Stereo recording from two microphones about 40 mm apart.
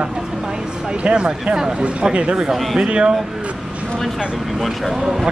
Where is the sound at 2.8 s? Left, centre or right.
Right.